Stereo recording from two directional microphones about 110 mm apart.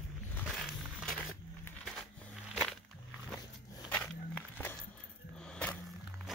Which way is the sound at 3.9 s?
15° left (ahead or behind).